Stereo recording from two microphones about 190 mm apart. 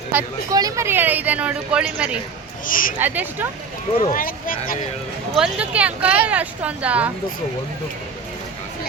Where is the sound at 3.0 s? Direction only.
10° right (ahead or behind).